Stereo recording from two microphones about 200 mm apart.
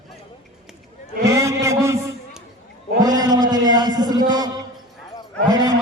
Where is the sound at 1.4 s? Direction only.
15° right (ahead or behind).